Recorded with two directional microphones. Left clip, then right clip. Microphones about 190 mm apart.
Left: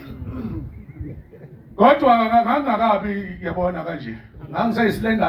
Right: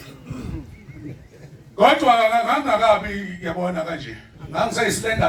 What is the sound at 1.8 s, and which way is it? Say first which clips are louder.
Speech: even; 25° left (ahead or behind).